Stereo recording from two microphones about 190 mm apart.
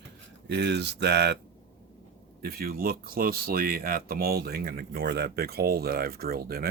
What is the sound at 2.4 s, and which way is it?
Speech, 50° right (ahead or behind).